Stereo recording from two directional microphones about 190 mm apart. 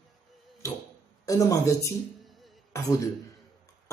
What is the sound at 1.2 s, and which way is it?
Speech, 15° left (ahead or behind).